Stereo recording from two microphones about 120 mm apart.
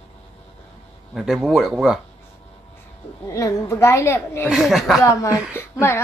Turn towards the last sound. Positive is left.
turn(degrees=20)  # may be behind; listen again after turning